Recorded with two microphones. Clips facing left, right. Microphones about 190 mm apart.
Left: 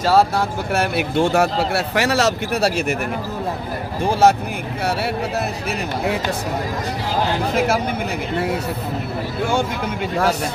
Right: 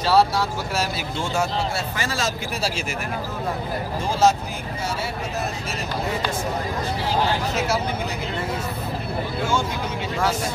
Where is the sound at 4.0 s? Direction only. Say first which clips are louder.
Left 4 dB; 60° left (ahead or behind).